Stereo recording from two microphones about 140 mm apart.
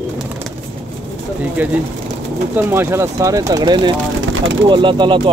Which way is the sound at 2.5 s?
20° right (ahead or behind).